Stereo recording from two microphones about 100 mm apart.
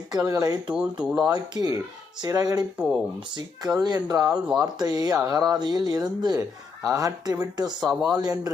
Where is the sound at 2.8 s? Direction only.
10° right (ahead or behind).